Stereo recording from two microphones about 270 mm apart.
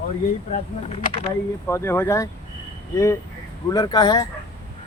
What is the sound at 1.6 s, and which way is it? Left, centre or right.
Speech, centre.